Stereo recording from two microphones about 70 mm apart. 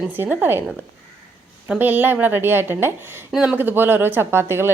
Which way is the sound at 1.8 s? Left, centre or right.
Right.